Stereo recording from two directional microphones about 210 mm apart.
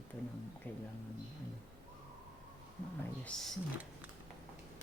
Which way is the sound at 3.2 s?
5° left (ahead or behind).